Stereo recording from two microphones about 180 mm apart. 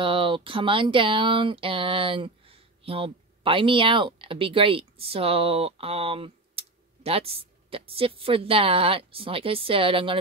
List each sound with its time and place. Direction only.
0.0 s speech: 30° right (ahead or behind)